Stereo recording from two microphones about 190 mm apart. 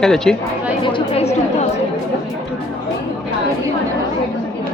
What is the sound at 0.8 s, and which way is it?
Speech, 30° left (ahead or behind).